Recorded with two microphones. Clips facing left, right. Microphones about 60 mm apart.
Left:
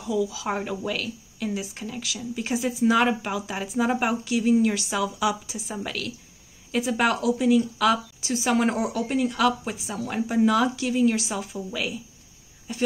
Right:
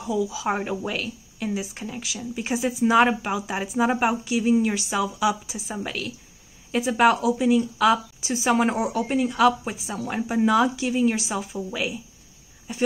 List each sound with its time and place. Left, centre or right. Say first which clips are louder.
0.2 s speech: right 2 dB; centre